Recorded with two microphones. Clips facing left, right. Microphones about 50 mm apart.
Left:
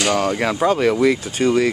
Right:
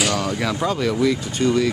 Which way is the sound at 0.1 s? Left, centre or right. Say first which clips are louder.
Left 4 dB; left.